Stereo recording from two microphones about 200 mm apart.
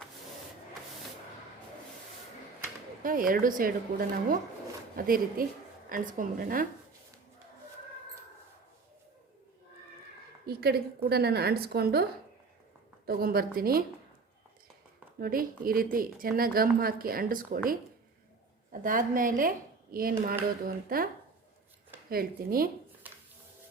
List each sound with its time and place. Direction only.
3.0 s a woman's voice: 45° right (ahead or behind)
10.4 s a woman's voice: 50° right (ahead or behind)
13.1 s a woman's voice: 50° right (ahead or behind)
15.2 s a woman's voice: 45° right (ahead or behind)
22.1 s a woman's voice: 50° right (ahead or behind)